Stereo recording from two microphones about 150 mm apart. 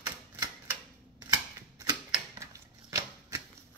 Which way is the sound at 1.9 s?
30° right (ahead or behind).